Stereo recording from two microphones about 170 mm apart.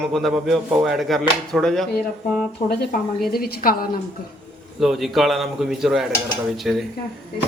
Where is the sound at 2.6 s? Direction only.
45° left (ahead or behind).